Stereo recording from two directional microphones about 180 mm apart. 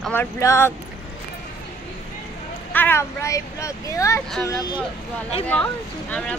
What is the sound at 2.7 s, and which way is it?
Speech, 10° left (ahead or behind).